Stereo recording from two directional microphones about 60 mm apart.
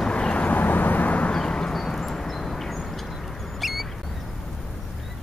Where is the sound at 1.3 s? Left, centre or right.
Centre.